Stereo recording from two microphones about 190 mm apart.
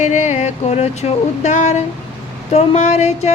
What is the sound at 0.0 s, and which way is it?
A woman's voice, 40° left (ahead or behind).